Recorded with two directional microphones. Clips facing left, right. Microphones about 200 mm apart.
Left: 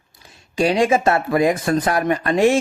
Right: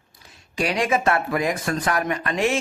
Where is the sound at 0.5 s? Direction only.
30° left (ahead or behind).